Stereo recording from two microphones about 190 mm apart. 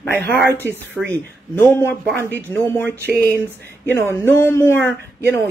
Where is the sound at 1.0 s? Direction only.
10° left (ahead or behind).